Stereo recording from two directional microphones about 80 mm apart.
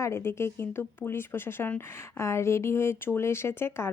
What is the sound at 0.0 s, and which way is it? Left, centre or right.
Speech, left.